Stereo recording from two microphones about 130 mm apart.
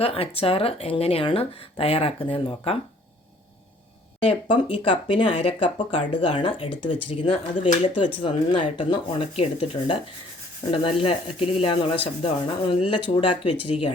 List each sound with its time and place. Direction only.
0.0 s speech: 50° left (ahead or behind)
4.3 s speech: 45° left (ahead or behind)